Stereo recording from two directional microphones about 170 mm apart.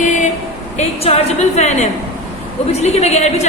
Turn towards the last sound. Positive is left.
turn(degrees=40)  # may be behind; listen again after turning